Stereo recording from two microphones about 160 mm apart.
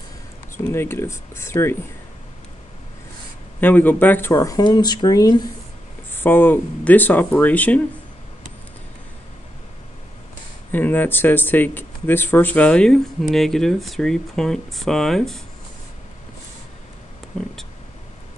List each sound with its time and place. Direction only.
0.7 s speech: 15° left (ahead or behind)
3.6 s speech: 10° left (ahead or behind)
6.1 s speech: 10° left (ahead or behind)
10.7 s speech: 10° left (ahead or behind)